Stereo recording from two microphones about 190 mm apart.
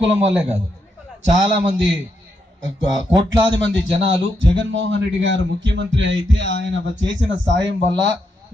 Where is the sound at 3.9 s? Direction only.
70° right (ahead or behind).